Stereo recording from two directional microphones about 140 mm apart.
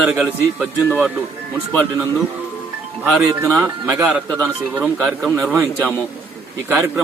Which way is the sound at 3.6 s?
15° right (ahead or behind).